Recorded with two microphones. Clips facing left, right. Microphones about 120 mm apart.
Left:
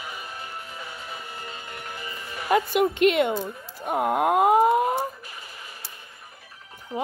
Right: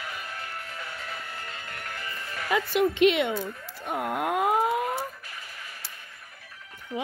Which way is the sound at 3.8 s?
55° left (ahead or behind).